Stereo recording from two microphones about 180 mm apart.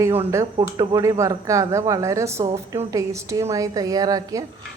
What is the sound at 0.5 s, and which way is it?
Speech, 25° right (ahead or behind).